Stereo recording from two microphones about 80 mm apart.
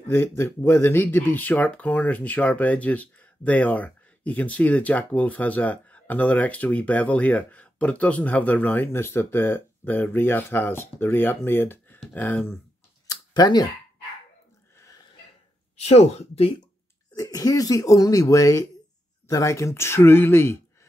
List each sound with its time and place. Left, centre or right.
0.1 s speech: left
13.0 s a sound: left
17.1 s speech: left